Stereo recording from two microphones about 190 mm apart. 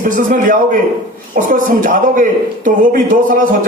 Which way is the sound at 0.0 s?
45° right (ahead or behind).